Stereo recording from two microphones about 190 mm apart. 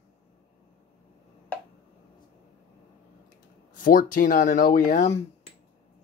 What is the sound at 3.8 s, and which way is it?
Speech, 45° left (ahead or behind).